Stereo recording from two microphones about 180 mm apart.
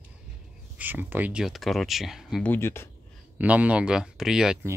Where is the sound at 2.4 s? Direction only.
10° left (ahead or behind).